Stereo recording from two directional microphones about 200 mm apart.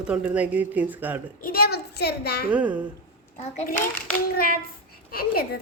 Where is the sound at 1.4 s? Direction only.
50° left (ahead or behind).